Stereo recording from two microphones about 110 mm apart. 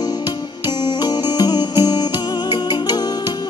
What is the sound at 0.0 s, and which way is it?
Music, 40° left (ahead or behind).